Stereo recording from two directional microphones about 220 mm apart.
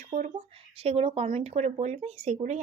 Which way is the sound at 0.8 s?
25° right (ahead or behind).